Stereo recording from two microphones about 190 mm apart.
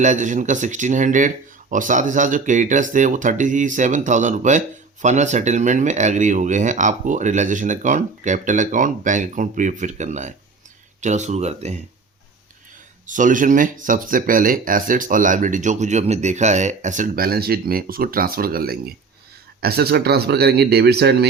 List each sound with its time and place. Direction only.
0.0 s speech: 40° right (ahead or behind)
13.1 s speech: 45° right (ahead or behind); by 21.2 s 60° right (ahead or behind)